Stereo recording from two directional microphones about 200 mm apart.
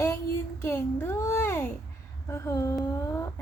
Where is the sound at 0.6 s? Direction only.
10° left (ahead or behind).